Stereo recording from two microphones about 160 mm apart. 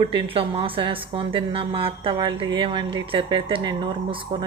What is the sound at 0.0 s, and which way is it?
A woman's voice, 35° right (ahead or behind).